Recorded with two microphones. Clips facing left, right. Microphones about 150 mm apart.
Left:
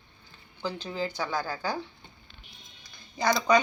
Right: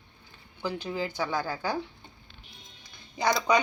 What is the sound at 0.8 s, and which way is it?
Speech, 15° right (ahead or behind).